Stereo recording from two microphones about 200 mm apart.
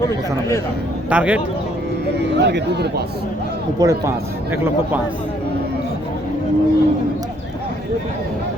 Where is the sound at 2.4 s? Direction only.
55° right (ahead or behind).